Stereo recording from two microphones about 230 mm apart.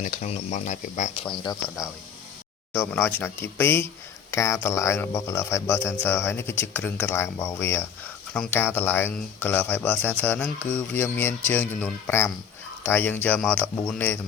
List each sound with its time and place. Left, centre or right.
0.0 s speech: left; by 14.2 s centre